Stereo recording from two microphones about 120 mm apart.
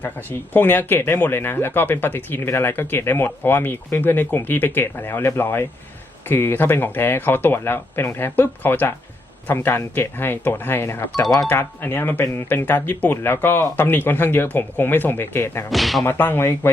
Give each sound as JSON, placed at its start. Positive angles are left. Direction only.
{"t": 0.0, "sound": "speech", "side_deg": 15}
{"t": 15.7, "sound": "speech", "side_deg": 0}
{"t": 16.0, "sound": "speech", "side_deg": 15}